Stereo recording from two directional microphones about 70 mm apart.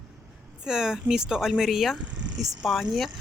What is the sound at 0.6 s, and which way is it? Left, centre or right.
Speech, centre.